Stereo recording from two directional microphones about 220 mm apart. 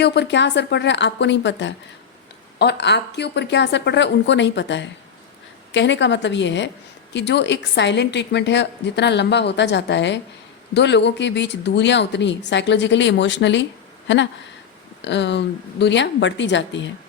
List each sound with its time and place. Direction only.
0.0 s a woman's voice: 50° left (ahead or behind)
15.0 s a woman's voice: 50° left (ahead or behind)